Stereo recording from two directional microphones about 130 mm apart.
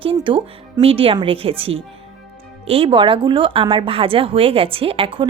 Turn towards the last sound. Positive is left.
turn(degrees=-45)  # may be behind; listen again after turning